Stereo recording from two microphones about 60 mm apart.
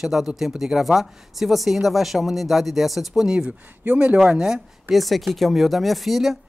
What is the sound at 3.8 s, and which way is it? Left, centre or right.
Speech, right.